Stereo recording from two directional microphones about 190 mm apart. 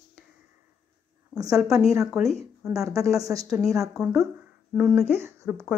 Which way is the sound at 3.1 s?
15° right (ahead or behind).